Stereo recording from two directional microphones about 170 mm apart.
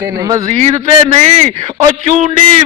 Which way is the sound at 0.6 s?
40° right (ahead or behind).